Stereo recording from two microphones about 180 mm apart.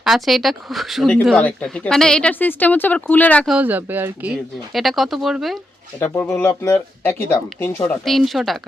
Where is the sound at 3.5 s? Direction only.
10° right (ahead or behind).